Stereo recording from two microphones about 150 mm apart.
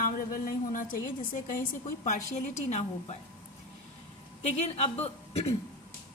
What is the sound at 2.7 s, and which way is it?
Speech, 45° left (ahead or behind).